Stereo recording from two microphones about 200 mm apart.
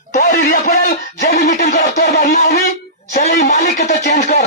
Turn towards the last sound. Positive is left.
turn(degrees=35)  # may be behind; listen again after turning